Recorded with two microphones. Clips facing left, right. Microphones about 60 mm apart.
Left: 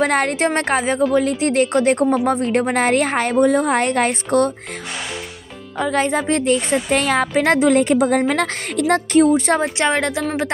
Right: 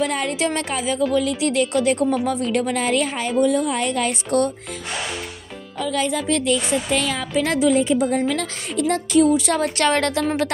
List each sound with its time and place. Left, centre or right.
0.0 s a woman's voice: left
5.8 s a woman's voice: left
9.6 s a woman's voice: centre